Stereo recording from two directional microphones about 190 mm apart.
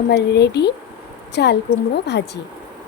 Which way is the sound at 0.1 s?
60° left (ahead or behind).